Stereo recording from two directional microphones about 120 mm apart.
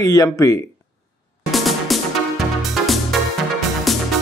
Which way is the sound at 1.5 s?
Centre (ahead or behind).